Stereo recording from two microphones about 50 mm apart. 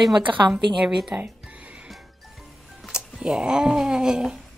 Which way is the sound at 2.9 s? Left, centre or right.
Centre.